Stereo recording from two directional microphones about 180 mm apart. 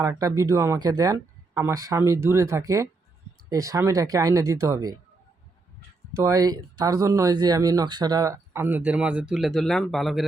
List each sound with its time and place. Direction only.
0.0 s speech: 20° right (ahead or behind)
6.1 s speech: 20° right (ahead or behind); by 10.2 s centre (ahead or behind)